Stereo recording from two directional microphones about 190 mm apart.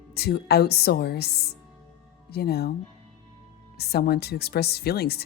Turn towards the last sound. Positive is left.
turn(degrees=55)  # may be behind; listen again after turning